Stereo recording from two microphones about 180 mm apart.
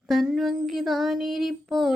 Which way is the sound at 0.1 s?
Centre (ahead or behind).